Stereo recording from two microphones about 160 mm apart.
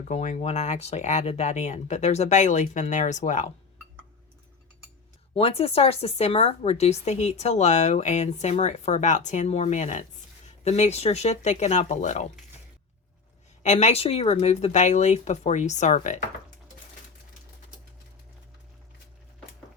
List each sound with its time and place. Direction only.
0.1 s speech: 45° left (ahead or behind)
5.3 s speech: 40° left (ahead or behind)
13.6 s speech: 45° left (ahead or behind)